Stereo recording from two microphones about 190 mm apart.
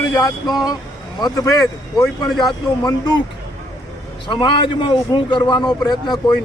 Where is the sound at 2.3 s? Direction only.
Centre (ahead or behind).